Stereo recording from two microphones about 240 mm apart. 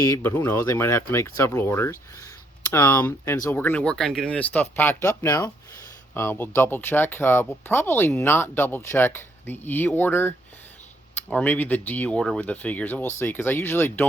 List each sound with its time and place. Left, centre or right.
0.0 s speech: centre